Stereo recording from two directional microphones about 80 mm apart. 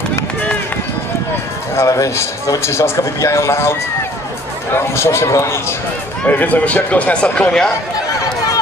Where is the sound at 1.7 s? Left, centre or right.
Left.